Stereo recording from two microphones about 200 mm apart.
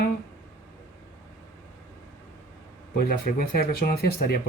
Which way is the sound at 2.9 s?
45° left (ahead or behind).